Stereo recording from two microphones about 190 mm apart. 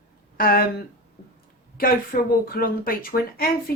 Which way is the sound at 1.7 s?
50° left (ahead or behind).